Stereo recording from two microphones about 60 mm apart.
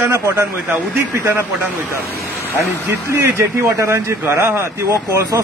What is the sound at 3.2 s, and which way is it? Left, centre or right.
Speech, right.